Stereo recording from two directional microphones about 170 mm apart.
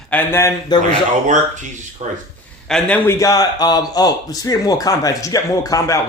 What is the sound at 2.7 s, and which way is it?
A man's voice, 5° left (ahead or behind).